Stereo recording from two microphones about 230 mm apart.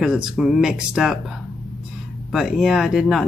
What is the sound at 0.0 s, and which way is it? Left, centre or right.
Speech, centre.